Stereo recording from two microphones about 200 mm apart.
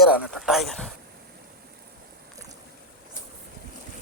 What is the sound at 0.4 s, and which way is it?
Speech, centre (ahead or behind).